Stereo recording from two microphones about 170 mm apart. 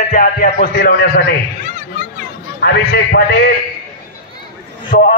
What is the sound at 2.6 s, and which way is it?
Speech, 80° left.